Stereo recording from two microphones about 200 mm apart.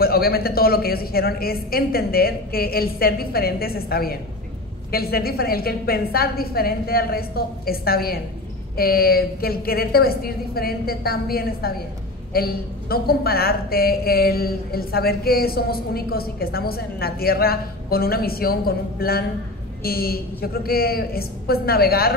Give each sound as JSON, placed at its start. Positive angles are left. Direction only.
{"t": 0.0, "sound": "a woman's voice", "side_deg": 50}